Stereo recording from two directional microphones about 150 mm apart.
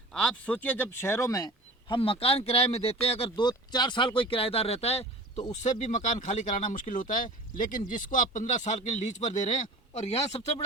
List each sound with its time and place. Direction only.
0.1 s speech: 5° left (ahead or behind); by 1.5 s 20° left (ahead or behind)
1.9 s speech: 40° left (ahead or behind); by 9.6 s 60° left (ahead or behind)
10.3 s speech: 40° left (ahead or behind)